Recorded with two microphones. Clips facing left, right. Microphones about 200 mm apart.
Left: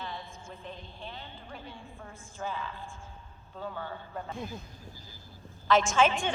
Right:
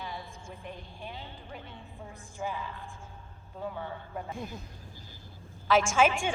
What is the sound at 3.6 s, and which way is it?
Speech, 5° right (ahead or behind).